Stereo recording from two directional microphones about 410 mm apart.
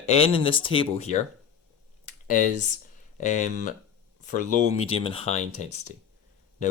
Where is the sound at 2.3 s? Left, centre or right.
Centre.